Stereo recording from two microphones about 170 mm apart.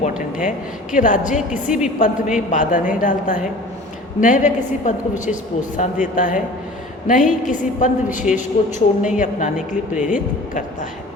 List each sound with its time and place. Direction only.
0.0 s a woman's voice: 50° left (ahead or behind)